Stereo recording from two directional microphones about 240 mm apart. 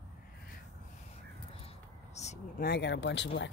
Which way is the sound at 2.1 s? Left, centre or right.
Left.